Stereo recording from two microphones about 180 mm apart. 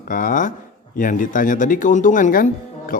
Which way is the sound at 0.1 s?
45° left (ahead or behind).